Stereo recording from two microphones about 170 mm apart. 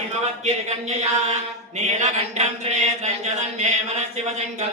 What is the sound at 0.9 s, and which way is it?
Mantra, 40° right (ahead or behind).